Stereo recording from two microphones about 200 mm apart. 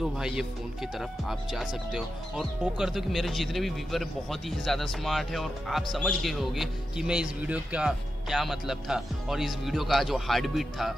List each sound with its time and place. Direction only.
0.0 s speech: 5° right (ahead or behind)